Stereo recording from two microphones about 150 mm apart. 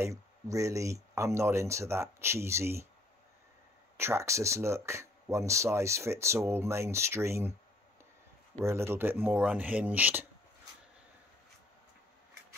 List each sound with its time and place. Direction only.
0.0 s speech: 20° right (ahead or behind)
3.9 s speech: 15° right (ahead or behind)
8.6 s speech: 15° right (ahead or behind)